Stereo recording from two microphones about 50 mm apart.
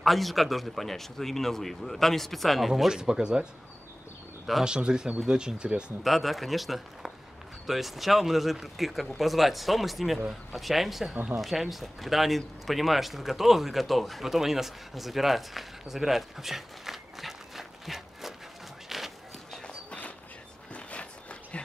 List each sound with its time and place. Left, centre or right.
0.0 s a man's voice: centre
2.9 s speech: centre
4.6 s speech: centre
6.0 s a man's voice: centre
18.9 s walk: centre
20.7 s a sound: left